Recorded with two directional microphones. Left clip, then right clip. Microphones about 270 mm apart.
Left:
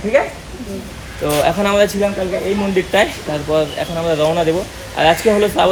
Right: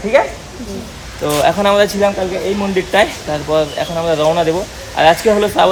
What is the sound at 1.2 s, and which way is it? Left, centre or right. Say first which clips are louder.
Speech: right 3 dB; centre.